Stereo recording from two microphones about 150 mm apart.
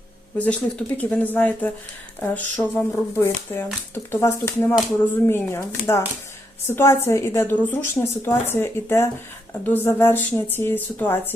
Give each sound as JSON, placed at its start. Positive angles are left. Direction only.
{"t": 0.3, "sound": "speech", "side_deg": 10}